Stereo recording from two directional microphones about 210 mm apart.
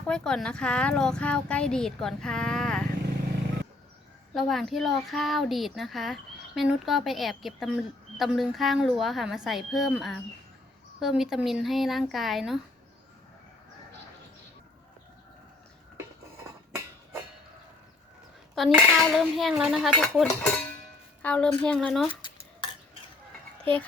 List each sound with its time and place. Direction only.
0.1 s speech: 5° left (ahead or behind)
4.4 s speech: centre (ahead or behind)
18.5 s speech: centre (ahead or behind)
22.1 s cutlery: 25° left (ahead or behind)